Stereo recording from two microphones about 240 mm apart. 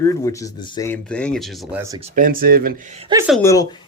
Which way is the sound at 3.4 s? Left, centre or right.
Centre.